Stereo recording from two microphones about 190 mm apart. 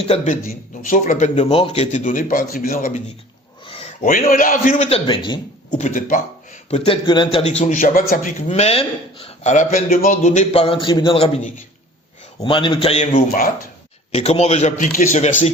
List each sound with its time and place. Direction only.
0.0 s a man's voice: 35° left (ahead or behind)
4.0 s a man's voice: 45° left (ahead or behind)
5.0 s a man's voice: 25° left (ahead or behind)
5.7 s a man's voice: 40° left (ahead or behind)
12.4 s a man's voice: 30° left (ahead or behind)
13.1 s a man's voice: 45° left (ahead or behind)
14.1 s a man's voice: 35° left (ahead or behind)